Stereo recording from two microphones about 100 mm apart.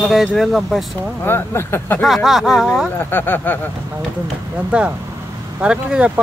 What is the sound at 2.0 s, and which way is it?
Speech, centre (ahead or behind).